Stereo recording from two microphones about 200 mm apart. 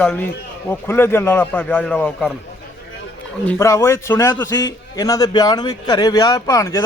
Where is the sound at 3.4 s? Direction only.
15° left (ahead or behind).